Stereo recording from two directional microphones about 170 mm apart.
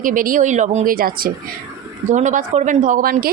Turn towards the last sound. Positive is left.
turn(degrees=-55)  # may be behind; listen again after turning